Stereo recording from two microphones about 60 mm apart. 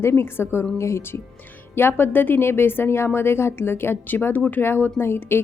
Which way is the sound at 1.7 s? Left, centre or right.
Left.